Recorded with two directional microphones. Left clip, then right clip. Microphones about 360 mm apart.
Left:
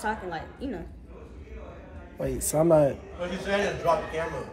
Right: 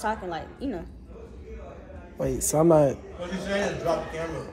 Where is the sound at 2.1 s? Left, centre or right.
Centre.